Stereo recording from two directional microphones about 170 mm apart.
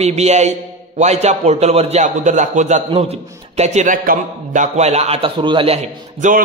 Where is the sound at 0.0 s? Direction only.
40° right (ahead or behind).